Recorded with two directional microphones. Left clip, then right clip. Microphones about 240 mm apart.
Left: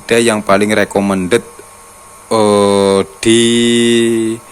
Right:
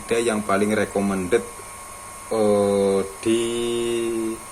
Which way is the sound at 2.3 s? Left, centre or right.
Left.